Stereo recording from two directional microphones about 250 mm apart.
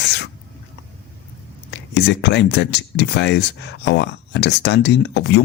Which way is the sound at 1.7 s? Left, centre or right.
Left.